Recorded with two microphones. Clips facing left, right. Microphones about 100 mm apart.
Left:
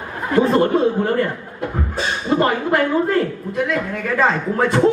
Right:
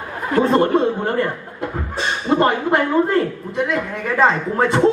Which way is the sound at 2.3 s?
25° right (ahead or behind).